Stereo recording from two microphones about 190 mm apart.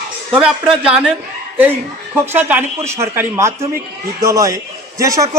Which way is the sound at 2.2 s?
10° right (ahead or behind).